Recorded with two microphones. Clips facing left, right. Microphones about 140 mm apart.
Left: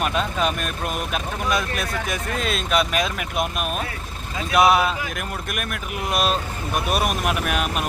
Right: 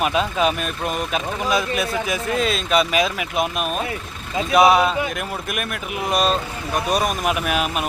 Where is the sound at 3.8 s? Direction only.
20° right (ahead or behind).